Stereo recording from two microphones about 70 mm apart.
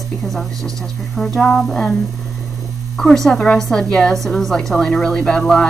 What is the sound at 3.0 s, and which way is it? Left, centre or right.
A woman's voice, centre.